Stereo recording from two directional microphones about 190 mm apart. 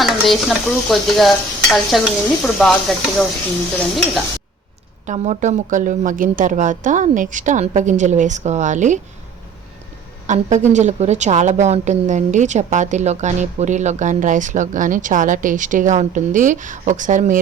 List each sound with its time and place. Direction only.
0.0 s stir: centre (ahead or behind)
5.0 s a woman's voice: 40° right (ahead or behind)
10.2 s a woman's voice: 40° right (ahead or behind)